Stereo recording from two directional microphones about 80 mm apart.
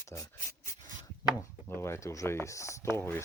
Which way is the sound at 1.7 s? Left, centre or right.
Left.